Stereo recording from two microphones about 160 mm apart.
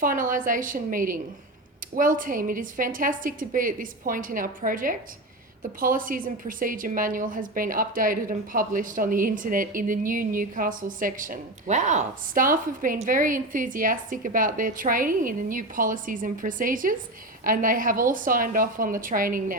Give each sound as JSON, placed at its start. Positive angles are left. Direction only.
{"t": 0.0, "sound": "a woman's voice", "side_deg": -55}